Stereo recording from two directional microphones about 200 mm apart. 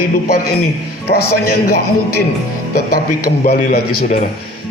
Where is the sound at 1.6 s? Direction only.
50° left (ahead or behind).